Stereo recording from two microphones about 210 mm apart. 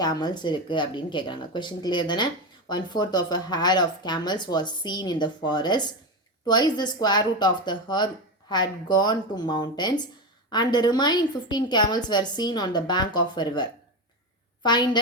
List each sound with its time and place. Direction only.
0.0 s a woman's voice: 20° left (ahead or behind)